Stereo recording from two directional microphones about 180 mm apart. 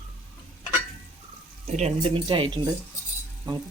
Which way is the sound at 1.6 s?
35° right (ahead or behind).